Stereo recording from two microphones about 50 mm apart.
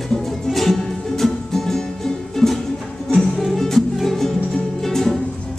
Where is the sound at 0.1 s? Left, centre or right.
Centre.